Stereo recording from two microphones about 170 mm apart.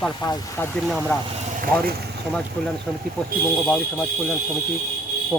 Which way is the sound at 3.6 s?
5° left (ahead or behind).